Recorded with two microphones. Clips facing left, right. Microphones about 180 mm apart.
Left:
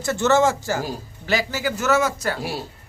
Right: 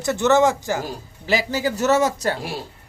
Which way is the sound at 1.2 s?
30° right (ahead or behind).